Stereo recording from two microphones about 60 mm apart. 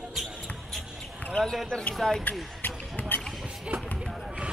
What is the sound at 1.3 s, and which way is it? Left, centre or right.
Speech, centre.